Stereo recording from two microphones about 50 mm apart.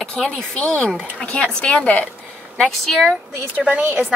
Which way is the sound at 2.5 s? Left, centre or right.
Centre.